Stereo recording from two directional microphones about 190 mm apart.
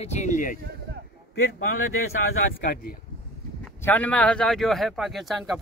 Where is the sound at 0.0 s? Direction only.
35° left (ahead or behind).